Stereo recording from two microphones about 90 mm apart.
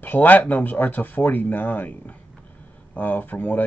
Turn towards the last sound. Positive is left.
turn(degrees=20)  # may be behind; listen again after turning